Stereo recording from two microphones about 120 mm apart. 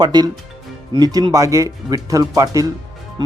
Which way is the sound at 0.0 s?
35° right (ahead or behind).